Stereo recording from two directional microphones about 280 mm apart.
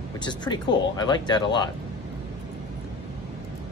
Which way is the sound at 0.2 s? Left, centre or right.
Centre.